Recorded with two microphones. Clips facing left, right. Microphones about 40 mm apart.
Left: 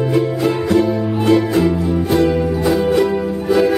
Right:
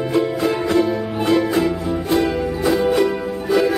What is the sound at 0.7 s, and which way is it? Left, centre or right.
Ukulele, centre.